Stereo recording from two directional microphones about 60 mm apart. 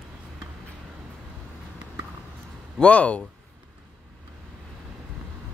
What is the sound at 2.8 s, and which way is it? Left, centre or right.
Speech, left.